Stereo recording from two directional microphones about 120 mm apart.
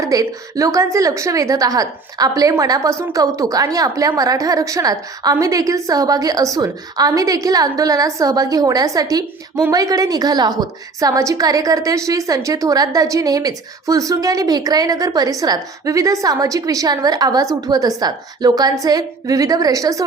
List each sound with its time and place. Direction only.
0.0 s a woman's voice: 30° right (ahead or behind)